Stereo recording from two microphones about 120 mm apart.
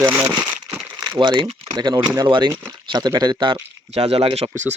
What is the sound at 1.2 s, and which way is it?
Speech, 40° right (ahead or behind).